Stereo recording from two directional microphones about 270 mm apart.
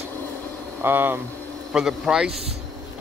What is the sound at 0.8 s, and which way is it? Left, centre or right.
Speech, centre.